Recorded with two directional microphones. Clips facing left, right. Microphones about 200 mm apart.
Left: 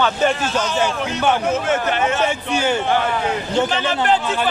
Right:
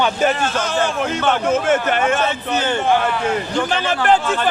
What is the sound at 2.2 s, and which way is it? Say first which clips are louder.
Speech: left 1 dB; 10° left (ahead or behind).